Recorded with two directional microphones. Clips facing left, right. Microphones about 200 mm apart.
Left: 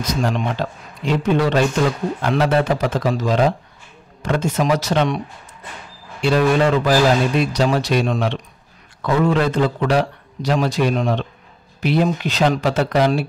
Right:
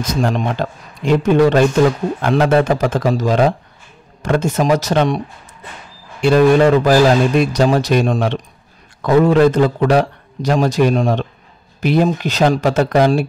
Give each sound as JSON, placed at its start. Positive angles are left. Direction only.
{"t": 0.0, "sound": "a man's voice", "side_deg": -50}
{"t": 6.2, "sound": "a man's voice", "side_deg": -50}